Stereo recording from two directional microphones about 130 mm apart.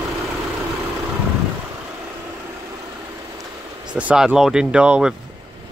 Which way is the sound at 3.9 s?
10° right (ahead or behind).